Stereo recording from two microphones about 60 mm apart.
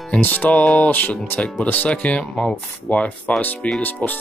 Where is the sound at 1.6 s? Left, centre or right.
Left.